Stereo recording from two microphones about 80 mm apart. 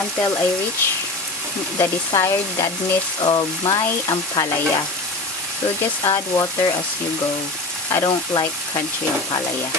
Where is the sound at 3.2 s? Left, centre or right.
Left.